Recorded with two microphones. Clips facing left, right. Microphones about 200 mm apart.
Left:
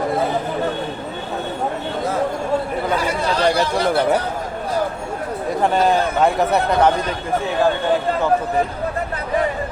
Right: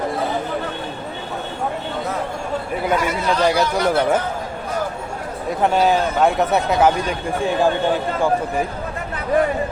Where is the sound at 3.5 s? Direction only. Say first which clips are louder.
Even; 30° left (ahead or behind).